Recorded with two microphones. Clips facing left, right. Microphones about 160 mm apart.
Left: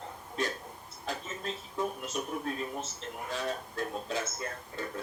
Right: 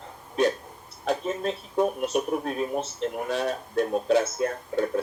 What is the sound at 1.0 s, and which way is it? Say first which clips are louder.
Speech: right 11 dB; 65° right (ahead or behind).